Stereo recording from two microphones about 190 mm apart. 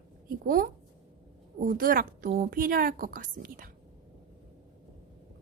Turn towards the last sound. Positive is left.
turn(degrees=-45)  # may be behind; listen again after turning